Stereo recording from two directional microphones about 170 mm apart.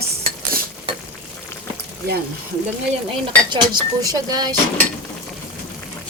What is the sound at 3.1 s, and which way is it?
Speech, 25° right (ahead or behind).